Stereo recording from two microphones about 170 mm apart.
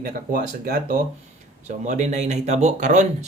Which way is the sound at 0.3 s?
55° right (ahead or behind).